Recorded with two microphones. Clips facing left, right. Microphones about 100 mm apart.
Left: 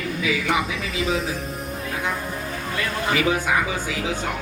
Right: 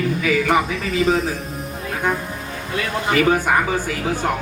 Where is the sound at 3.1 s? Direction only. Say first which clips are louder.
Right 5 dB; 50° right (ahead or behind).